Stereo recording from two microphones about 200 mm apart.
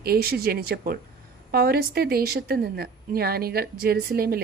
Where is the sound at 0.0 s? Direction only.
50° right (ahead or behind).